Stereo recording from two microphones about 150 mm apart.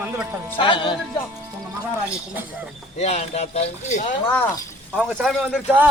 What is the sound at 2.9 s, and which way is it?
Speech, 45° left (ahead or behind).